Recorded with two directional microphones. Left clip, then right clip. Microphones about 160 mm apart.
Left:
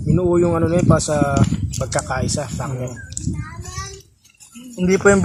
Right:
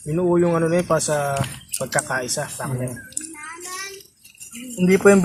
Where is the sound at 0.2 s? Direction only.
30° left (ahead or behind).